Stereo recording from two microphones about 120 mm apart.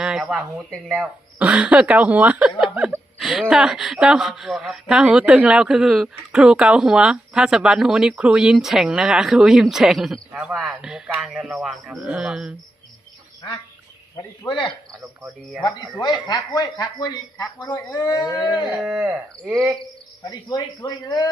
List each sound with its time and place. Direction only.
0.0 s a sound: 5° right (ahead or behind)
1.0 s speech: 10° right (ahead or behind)
3.2 s a sound: 5° right (ahead or behind)
3.5 s speech: 5° right (ahead or behind)
14.4 s speech: 40° left (ahead or behind)
18.3 s speech: centre (ahead or behind)
20.2 s speech: 30° left (ahead or behind)